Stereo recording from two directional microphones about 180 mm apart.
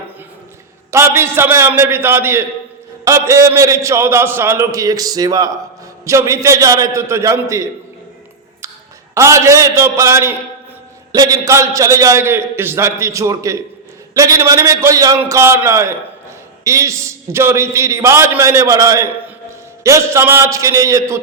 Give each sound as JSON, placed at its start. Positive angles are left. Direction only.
{"t": 0.9, "sound": "a man's voice", "side_deg": -15}
{"t": 9.1, "sound": "a man's voice", "side_deg": -15}